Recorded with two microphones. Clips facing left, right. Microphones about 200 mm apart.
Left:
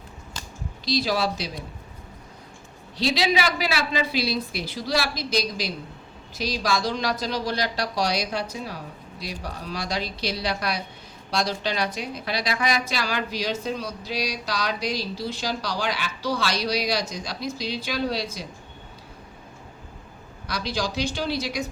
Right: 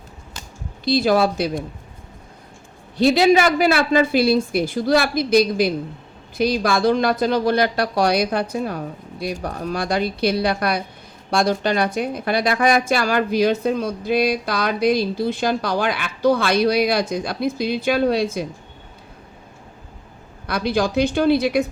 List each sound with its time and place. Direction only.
0.9 s a woman's voice: 55° right (ahead or behind)
3.0 s a woman's voice: 50° right (ahead or behind)
20.5 s a woman's voice: 55° right (ahead or behind)